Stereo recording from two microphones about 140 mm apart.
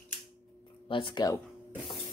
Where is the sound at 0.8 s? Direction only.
35° left (ahead or behind).